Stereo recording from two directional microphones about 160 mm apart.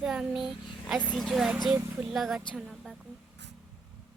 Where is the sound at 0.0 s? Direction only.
5° right (ahead or behind).